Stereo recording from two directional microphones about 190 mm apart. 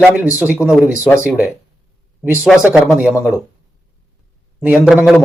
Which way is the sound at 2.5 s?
5° right (ahead or behind).